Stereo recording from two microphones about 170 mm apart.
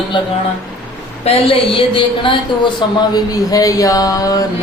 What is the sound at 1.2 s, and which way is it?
A woman's voice, 30° left (ahead or behind).